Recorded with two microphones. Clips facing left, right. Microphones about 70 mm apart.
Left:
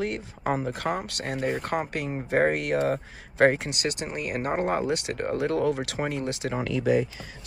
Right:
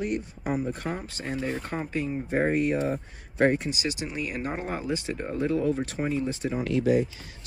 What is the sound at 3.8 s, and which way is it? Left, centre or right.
Speech, left.